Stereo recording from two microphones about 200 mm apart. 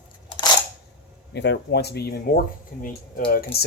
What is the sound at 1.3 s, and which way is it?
Speech, 60° left (ahead or behind).